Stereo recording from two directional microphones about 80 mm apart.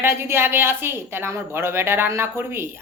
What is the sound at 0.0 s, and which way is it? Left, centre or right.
Speech, right.